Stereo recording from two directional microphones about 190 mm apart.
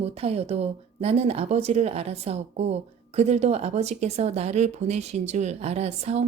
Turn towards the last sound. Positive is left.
turn(degrees=-35)  # may be behind; listen again after turning